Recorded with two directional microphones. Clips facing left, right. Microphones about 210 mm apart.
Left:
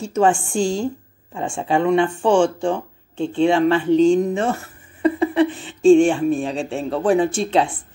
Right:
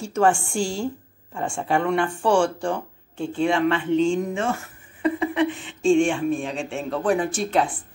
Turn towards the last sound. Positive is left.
turn(degrees=25)  # may be behind; listen again after turning